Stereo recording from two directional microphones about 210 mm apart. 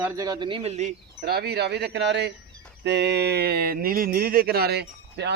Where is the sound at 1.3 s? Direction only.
50° right (ahead or behind).